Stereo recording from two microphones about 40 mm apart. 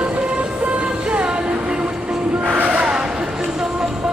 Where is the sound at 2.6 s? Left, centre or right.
Right.